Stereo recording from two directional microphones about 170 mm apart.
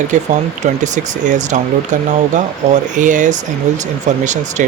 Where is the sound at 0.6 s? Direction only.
45° right (ahead or behind).